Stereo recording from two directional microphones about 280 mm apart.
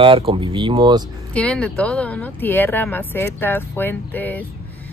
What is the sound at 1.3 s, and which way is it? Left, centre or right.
Speech, centre.